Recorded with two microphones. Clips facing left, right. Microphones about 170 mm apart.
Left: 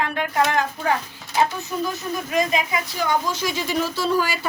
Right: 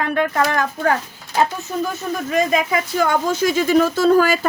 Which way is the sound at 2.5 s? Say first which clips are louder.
Right 6 dB; 55° right (ahead or behind).